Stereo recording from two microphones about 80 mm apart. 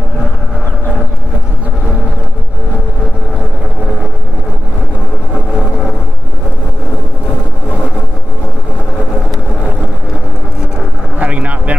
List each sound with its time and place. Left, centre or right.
11.1 s vehicle: centre